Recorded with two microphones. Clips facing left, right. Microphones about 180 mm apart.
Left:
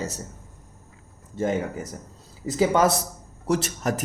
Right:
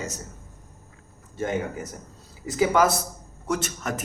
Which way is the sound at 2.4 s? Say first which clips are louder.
Left 1 dB; 30° left (ahead or behind).